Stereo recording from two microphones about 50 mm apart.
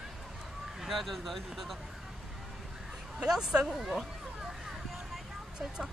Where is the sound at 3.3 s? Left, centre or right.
Centre.